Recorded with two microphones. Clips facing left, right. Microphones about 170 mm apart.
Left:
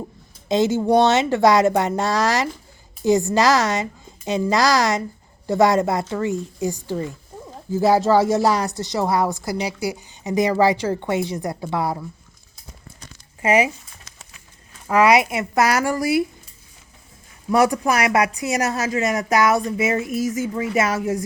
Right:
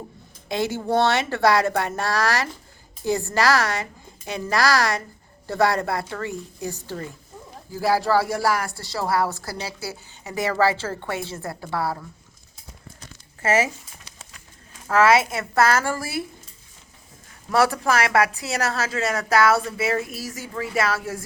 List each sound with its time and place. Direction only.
0.4 s a woman's voice: 20° left (ahead or behind)
13.4 s speech: 15° left (ahead or behind)
14.8 s a woman's voice: 15° left (ahead or behind)
17.5 s a woman's voice: 15° left (ahead or behind)